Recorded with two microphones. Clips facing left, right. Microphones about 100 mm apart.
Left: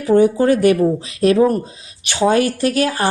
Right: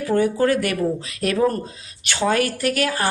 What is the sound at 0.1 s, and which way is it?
Speech, 20° left (ahead or behind).